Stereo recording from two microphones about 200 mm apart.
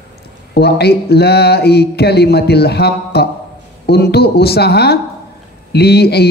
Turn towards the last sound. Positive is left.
turn(degrees=55)  # may be behind; listen again after turning